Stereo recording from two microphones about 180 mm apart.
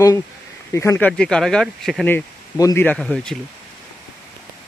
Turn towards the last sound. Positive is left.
turn(degrees=5)  # may be behind; listen again after turning